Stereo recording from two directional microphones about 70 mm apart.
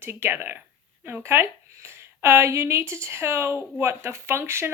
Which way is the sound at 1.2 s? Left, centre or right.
Right.